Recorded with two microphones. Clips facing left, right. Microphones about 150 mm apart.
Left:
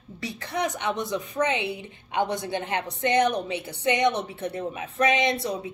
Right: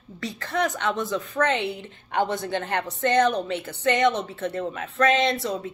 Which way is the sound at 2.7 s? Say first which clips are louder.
Right 2 dB; 55° right (ahead or behind).